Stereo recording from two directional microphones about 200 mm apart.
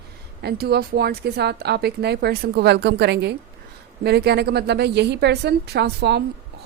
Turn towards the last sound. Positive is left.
turn(degrees=-55)  # may be behind; listen again after turning